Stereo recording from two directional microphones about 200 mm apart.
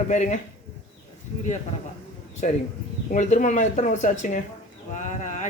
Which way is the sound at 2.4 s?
40° left (ahead or behind).